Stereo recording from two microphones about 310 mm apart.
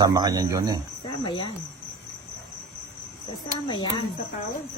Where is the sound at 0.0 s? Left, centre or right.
Centre.